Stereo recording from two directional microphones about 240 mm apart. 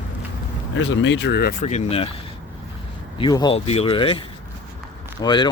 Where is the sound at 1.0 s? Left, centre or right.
Left.